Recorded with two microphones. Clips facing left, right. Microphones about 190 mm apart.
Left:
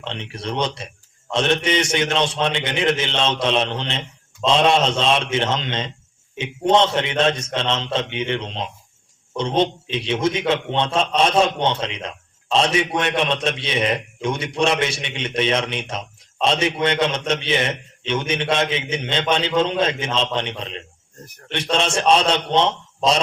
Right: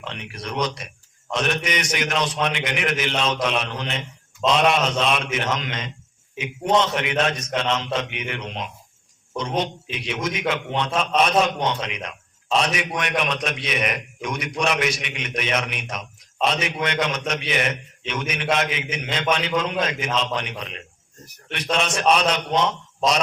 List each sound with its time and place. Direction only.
0.0 s a man's voice: 30° left (ahead or behind)